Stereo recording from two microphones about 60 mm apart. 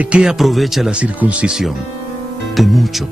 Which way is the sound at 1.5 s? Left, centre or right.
Centre.